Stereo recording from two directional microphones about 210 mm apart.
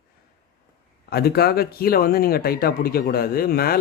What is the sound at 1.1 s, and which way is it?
Speech, 45° left (ahead or behind).